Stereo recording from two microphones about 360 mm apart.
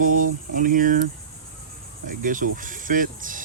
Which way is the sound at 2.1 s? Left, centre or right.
Right.